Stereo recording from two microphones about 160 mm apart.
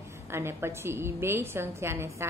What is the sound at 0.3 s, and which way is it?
A woman's voice, 15° right (ahead or behind).